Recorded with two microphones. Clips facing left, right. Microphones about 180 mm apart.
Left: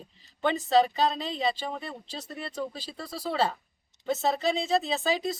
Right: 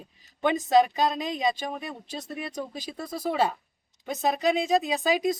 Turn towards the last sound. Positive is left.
turn(degrees=-15)  # may be behind; listen again after turning